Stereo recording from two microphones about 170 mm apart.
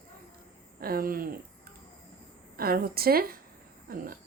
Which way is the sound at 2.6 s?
60° right (ahead or behind).